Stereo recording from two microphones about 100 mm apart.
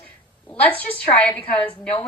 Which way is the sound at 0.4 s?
15° left (ahead or behind).